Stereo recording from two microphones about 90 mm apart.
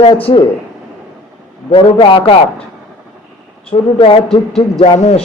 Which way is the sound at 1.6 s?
75° left (ahead or behind).